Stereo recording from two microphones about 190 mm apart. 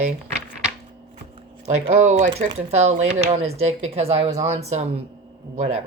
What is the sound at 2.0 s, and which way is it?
Speech, 40° right (ahead or behind).